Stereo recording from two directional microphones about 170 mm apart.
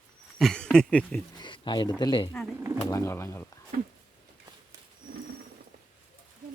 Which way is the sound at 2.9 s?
15° left (ahead or behind).